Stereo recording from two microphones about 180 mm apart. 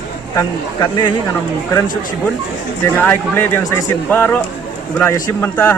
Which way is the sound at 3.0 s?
10° left (ahead or behind).